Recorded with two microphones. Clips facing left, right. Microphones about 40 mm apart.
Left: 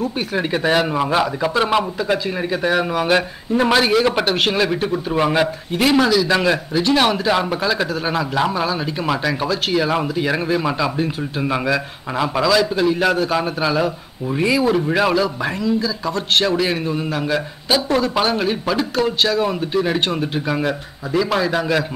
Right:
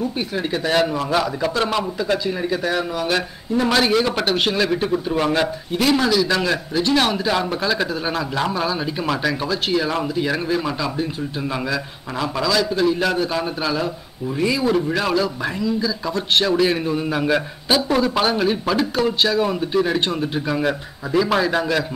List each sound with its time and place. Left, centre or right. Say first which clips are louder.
0.4 s a man's voice: left 2 dB; left
3.7 s a man's voice: left 2 dB; centre
7.6 s a man's voice: left 1 dB; centre
9.8 s a man's voice: left 2 dB; centre
15.8 s speech: left 1 dB; centre
20.6 s speech: even; centre